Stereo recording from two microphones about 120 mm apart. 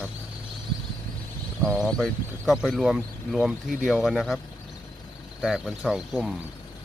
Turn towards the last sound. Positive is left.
turn(degrees=-5)  # may be behind; listen again after turning